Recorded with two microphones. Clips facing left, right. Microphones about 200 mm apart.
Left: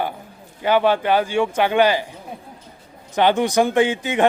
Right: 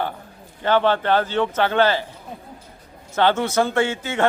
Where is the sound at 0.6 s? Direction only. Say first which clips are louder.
Left 1 dB; 10° left (ahead or behind).